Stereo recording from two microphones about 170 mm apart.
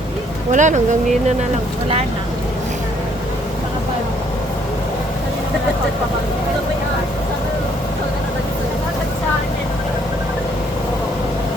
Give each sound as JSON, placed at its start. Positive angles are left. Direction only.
{"t": 0.5, "sound": "speech", "side_deg": -45}